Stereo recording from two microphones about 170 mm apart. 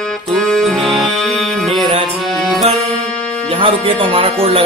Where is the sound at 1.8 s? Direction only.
35° right (ahead or behind).